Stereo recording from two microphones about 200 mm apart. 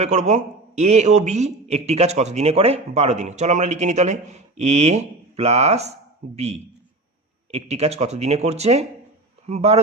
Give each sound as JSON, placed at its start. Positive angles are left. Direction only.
{"t": 0.0, "sound": "a man's voice", "side_deg": -35}